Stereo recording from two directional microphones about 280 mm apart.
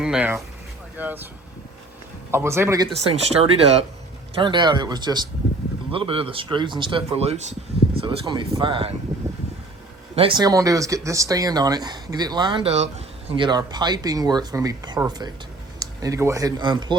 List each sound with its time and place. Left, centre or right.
0.0 s speech: centre
2.3 s speech: centre
10.2 s speech: centre